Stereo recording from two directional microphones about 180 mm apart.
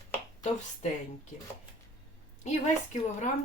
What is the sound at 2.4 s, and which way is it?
Speech, 40° left (ahead or behind).